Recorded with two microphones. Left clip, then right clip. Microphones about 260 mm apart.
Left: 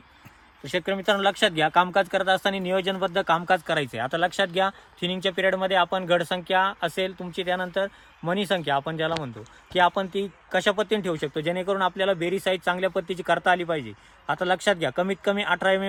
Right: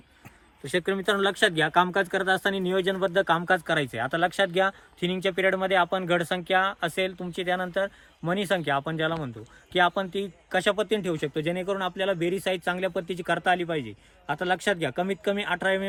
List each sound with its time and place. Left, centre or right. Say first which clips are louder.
0.6 s speech: left 1 dB; left